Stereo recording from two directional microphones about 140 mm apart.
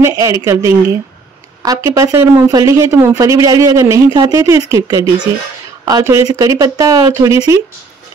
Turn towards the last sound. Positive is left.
turn(degrees=-25)  # may be behind; listen again after turning